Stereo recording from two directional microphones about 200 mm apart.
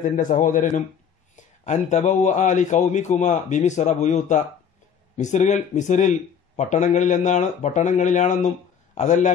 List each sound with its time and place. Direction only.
0.0 s speech: 40° left (ahead or behind)